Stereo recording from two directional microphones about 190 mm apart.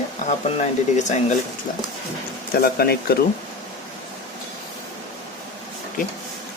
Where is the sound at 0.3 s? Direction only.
40° left (ahead or behind).